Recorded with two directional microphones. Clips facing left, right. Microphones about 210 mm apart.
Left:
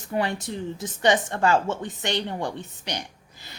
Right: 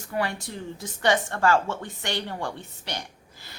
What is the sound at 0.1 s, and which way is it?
Speech, 20° left (ahead or behind).